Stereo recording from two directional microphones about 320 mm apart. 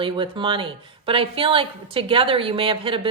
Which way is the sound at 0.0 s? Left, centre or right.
Centre.